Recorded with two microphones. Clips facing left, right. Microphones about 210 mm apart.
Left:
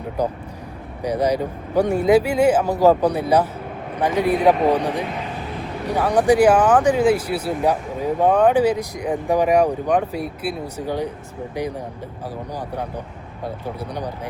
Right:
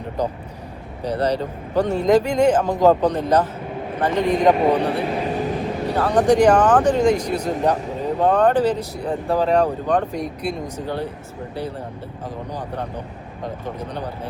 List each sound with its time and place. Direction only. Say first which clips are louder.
0.2 s speech: left 1 dB; 10° left (ahead or behind)
5.0 s speech: right 6 dB; 35° right (ahead or behind)
5.9 s speech: even; 10° left (ahead or behind)
12.5 s speech: even; 10° left (ahead or behind)